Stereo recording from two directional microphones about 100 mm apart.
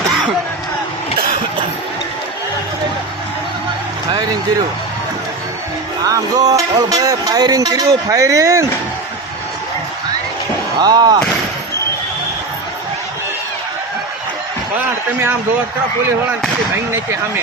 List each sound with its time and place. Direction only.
6.1 s music: 40° right (ahead or behind)
10.8 s speech: 40° right (ahead or behind)
16.9 s speech: 25° right (ahead or behind)